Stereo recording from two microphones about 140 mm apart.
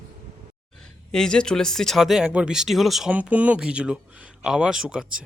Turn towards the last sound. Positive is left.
turn(degrees=-5)  # may be behind; listen again after turning